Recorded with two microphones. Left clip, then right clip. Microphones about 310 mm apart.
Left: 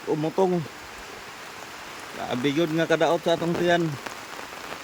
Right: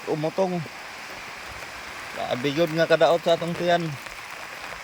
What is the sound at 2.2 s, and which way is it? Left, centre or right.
Speech, centre.